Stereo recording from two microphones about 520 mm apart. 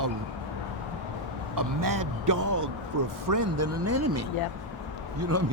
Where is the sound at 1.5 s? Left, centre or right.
Right.